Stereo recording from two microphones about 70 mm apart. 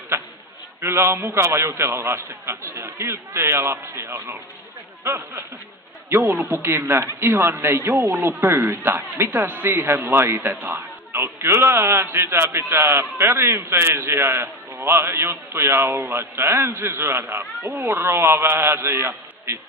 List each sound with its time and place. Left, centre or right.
0.8 s a man's voice: right
17.8 s a man's voice: right